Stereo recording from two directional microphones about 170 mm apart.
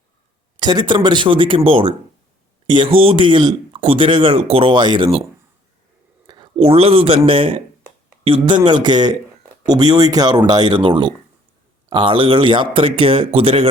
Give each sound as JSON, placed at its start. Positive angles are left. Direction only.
{"t": 0.6, "sound": "speech", "side_deg": -25}
{"t": 6.2, "sound": "a man's voice", "side_deg": -25}